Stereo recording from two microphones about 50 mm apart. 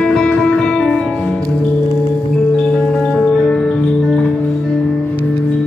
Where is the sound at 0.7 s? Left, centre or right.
Left.